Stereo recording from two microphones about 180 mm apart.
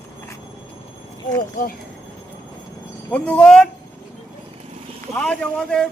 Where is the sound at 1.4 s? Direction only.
55° left (ahead or behind).